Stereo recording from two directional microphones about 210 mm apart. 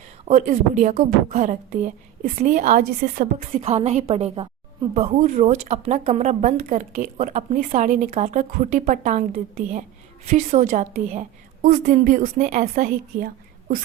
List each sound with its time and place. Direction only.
0.3 s a woman's voice: 35° right (ahead or behind)
3.3 s a woman's voice: 30° right (ahead or behind)